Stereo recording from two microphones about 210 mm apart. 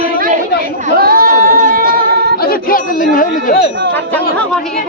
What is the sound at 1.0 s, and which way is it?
Singing, 45° right (ahead or behind).